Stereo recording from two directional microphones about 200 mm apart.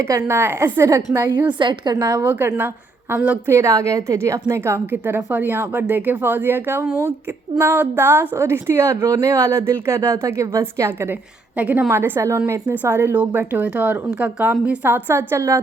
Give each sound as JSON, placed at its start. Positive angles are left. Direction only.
{"t": 0.1, "sound": "a woman's voice", "side_deg": -10}
{"t": 2.2, "sound": "a woman's voice", "side_deg": -10}